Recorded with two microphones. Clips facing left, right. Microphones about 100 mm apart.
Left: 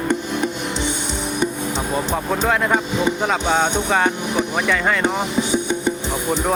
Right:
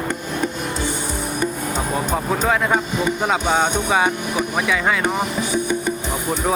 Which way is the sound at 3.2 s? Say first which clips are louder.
Right 2 dB; 5° right (ahead or behind).